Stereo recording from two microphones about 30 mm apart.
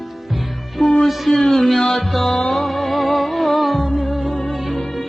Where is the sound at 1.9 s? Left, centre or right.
Centre.